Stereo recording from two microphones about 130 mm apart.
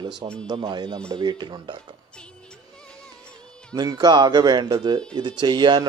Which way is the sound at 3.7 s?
30° right (ahead or behind).